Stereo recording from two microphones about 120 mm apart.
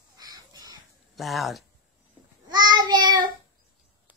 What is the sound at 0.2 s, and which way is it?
Bird, 35° right (ahead or behind).